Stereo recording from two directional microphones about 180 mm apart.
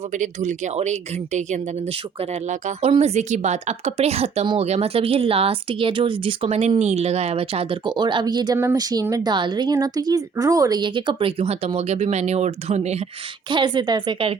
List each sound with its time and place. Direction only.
0.1 s a woman's voice: 40° right (ahead or behind)
13.5 s a woman's voice: 25° right (ahead or behind)